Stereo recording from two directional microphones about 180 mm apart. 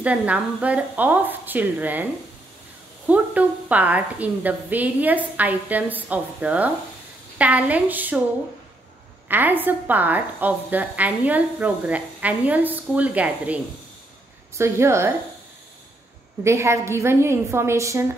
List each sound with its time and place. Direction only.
0.0 s a woman's voice: 10° right (ahead or behind)
3.1 s a woman's voice: 10° right (ahead or behind)
9.3 s a woman's voice: 10° right (ahead or behind)
14.6 s a woman's voice: 15° right (ahead or behind)
16.4 s a woman's voice: 15° right (ahead or behind)